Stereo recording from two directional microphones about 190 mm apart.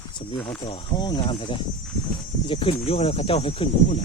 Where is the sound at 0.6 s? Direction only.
25° left (ahead or behind).